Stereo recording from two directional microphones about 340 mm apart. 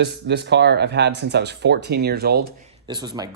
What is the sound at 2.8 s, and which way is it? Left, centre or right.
Speech, centre.